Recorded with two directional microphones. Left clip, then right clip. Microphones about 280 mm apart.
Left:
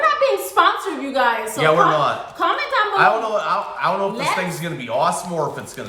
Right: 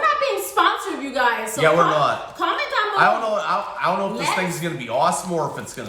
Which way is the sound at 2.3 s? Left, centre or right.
Centre.